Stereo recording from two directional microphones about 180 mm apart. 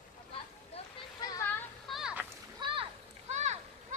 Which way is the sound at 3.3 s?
40° right (ahead or behind).